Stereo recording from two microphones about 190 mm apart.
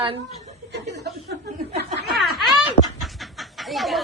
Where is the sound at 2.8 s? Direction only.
55° left (ahead or behind).